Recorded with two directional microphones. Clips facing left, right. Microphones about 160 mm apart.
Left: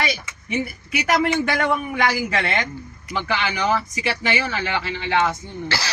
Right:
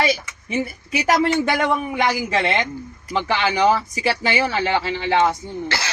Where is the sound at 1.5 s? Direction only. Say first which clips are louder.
Right 2 dB; 20° right (ahead or behind).